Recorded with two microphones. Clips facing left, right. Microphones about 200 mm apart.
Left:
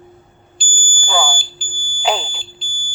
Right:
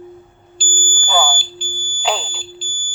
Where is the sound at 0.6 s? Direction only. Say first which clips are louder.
Right 6 dB; 20° left (ahead or behind).